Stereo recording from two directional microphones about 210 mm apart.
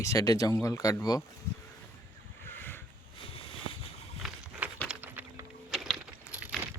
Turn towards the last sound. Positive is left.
turn(degrees=-10)  # may be behind; listen again after turning